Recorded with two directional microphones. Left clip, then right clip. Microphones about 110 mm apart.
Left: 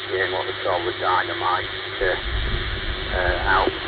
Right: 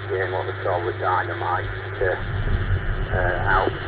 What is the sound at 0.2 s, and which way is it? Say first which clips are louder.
Speech: left 2 dB; 40° left (ahead or behind).